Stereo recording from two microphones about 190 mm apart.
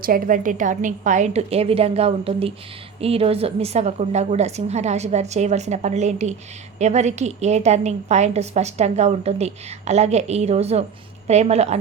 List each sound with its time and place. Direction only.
0.0 s a woman's voice: 45° right (ahead or behind)